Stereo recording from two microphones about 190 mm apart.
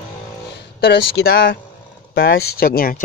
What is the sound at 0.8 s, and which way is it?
Speech, 60° left (ahead or behind).